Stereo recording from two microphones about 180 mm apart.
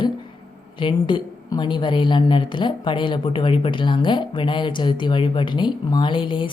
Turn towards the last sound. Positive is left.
turn(degrees=30)  # may be behind; listen again after turning